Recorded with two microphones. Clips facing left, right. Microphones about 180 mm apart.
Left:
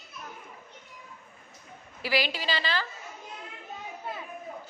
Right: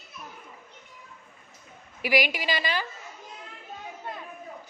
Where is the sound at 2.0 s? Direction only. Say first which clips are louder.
Right 3 dB; 15° right (ahead or behind).